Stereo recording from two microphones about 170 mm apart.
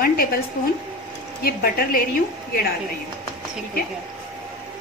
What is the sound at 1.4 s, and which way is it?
Speech, 60° left (ahead or behind).